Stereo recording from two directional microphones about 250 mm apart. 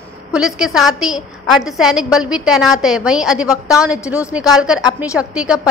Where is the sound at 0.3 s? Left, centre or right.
Centre.